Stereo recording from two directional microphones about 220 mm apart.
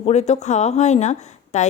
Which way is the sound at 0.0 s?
30° left (ahead or behind).